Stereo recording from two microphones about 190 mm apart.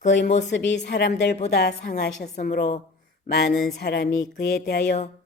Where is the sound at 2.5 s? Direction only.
55° left (ahead or behind).